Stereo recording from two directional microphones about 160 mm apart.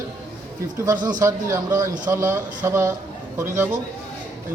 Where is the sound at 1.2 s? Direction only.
20° right (ahead or behind).